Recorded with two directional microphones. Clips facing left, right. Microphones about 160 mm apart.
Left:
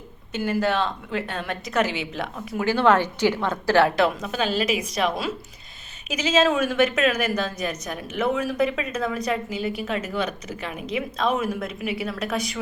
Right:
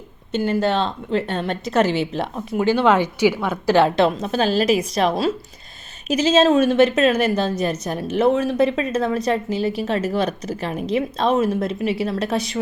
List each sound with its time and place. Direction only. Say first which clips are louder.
0.3 s a woman's voice: right 4 dB; 25° right (ahead or behind)